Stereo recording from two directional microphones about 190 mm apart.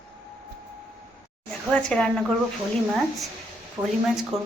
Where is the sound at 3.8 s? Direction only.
15° right (ahead or behind).